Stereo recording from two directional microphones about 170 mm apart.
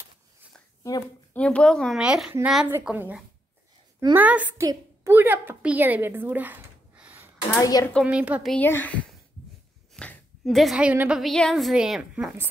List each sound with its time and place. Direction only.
1.3 s a woman's voice: 5° left (ahead or behind); by 7.2 s 10° right (ahead or behind)
7.5 s speech: 20° left (ahead or behind)
8.0 s a woman's voice: 5° right (ahead or behind)